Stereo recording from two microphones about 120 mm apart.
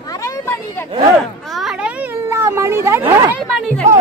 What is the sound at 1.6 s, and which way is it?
Children playing, 5° right (ahead or behind).